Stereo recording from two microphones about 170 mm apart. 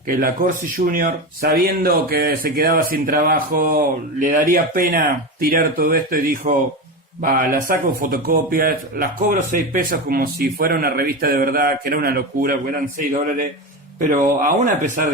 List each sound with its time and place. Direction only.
0.1 s speech: 60° right (ahead or behind)